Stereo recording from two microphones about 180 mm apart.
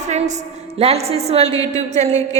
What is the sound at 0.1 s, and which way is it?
A woman's voice, 40° right (ahead or behind).